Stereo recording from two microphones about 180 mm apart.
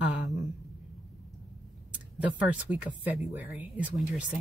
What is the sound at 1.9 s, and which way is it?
Speech, 10° right (ahead or behind).